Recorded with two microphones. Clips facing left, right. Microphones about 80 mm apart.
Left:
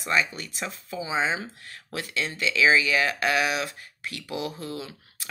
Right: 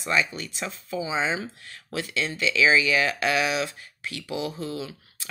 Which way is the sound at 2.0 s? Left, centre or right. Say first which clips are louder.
Right 2 dB; left.